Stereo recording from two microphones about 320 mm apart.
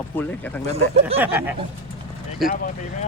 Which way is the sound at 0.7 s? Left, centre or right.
Centre.